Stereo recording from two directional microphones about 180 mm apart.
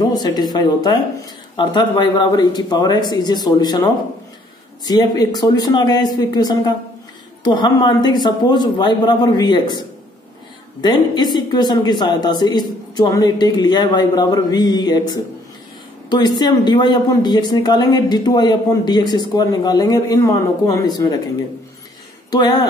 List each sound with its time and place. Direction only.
0.1 s a woman's voice: 20° left (ahead or behind)
16.1 s a woman's voice: 25° left (ahead or behind)
22.3 s a woman's voice: 25° left (ahead or behind)